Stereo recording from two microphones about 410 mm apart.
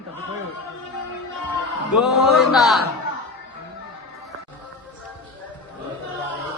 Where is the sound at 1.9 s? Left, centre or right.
Centre.